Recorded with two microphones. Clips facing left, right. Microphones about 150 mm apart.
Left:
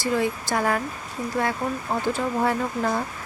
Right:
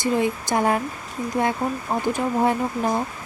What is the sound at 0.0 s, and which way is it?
Speech, 20° right (ahead or behind).